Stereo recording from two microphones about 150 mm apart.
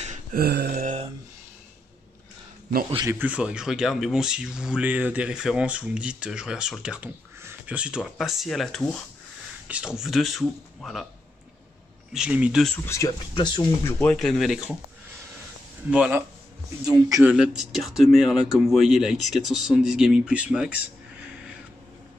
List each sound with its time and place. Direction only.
0.0 s a sound: 55° right (ahead or behind)
0.4 s a sound: 90° right
3.1 s speech: 10° right (ahead or behind)
12.1 s speech: 5° right (ahead or behind)
12.6 s speech: 15° left (ahead or behind)
13.3 s speech: 30° left (ahead or behind)
13.8 s speech: 10° left (ahead or behind)
14.1 s speech: centre (ahead or behind)
15.9 s speech: 10° right (ahead or behind)
16.8 s a man's voice: 25° right (ahead or behind)
17.2 s speech: 5° right (ahead or behind)